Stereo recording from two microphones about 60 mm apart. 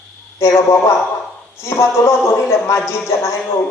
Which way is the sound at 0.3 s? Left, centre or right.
Left.